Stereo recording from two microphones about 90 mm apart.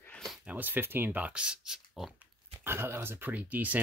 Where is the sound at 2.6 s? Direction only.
25° right (ahead or behind).